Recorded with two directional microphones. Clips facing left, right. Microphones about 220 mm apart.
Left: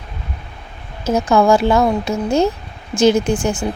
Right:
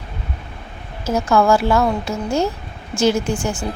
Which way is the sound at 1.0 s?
20° left (ahead or behind).